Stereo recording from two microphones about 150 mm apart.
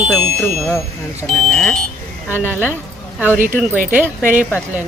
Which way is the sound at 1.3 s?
5° left (ahead or behind).